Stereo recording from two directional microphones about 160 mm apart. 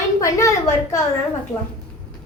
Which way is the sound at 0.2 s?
20° left (ahead or behind).